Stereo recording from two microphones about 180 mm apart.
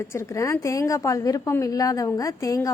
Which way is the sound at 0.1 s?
15° left (ahead or behind).